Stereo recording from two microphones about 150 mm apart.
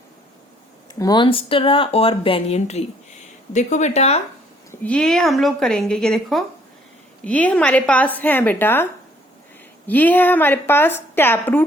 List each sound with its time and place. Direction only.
0.9 s speech: 25° left (ahead or behind); by 4.2 s 45° left (ahead or behind)
4.7 s a woman's voice: 10° left (ahead or behind)